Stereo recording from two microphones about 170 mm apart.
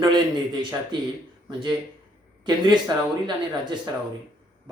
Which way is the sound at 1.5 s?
30° right (ahead or behind).